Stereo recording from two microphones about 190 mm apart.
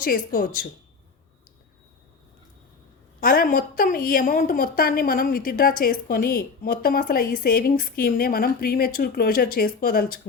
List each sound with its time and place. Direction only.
0.0 s a woman's voice: 45° left (ahead or behind)
3.2 s a woman's voice: 50° left (ahead or behind)